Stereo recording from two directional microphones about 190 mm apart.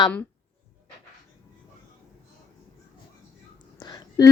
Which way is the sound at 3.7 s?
20° left (ahead or behind).